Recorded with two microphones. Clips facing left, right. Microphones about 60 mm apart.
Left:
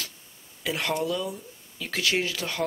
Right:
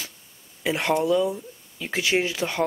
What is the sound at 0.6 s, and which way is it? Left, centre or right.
Speech, right.